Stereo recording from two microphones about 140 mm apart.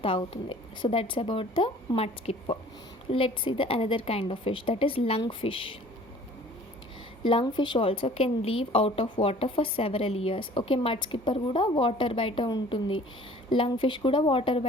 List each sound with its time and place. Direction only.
0.0 s a woman's voice: 40° left (ahead or behind)
7.3 s a woman's voice: 35° left (ahead or behind)